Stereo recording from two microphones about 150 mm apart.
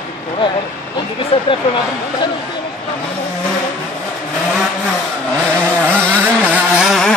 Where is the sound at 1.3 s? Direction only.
40° left (ahead or behind).